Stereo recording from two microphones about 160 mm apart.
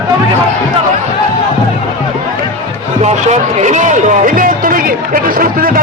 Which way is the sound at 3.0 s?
45° right (ahead or behind).